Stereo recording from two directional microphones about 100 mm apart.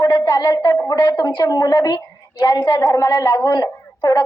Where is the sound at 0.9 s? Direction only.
45° left (ahead or behind).